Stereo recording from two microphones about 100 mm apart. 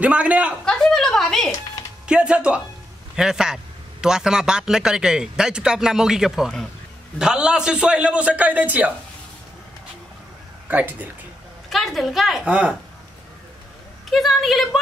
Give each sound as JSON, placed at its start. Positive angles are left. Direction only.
{"t": 0.0, "sound": "a man's voice", "side_deg": -15}
{"t": 0.7, "sound": "a sound", "side_deg": 5}
{"t": 2.0, "sound": "a man's voice", "side_deg": -10}
{"t": 10.7, "sound": "a man's voice", "side_deg": -15}
{"t": 11.7, "sound": "a woman's voice", "side_deg": 0}
{"t": 14.1, "sound": "a woman's voice", "side_deg": 0}